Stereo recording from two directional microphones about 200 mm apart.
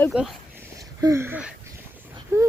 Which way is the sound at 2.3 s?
15° right (ahead or behind).